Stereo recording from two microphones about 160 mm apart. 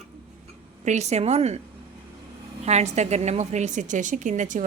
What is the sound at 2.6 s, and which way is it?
A woman's voice, 45° right (ahead or behind).